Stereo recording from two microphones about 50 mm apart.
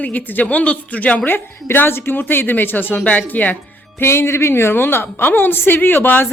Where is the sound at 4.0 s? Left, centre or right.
Left.